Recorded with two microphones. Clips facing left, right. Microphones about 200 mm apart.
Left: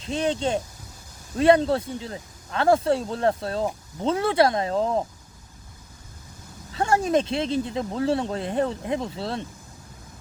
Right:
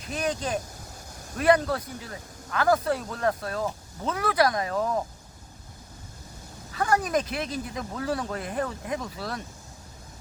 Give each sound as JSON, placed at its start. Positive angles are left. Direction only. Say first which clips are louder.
{"t": 0.0, "sound": "speech", "louder": "left 5 dB", "side_deg": 25}
{"t": 6.7, "sound": "speech", "louder": "left 4 dB", "side_deg": 25}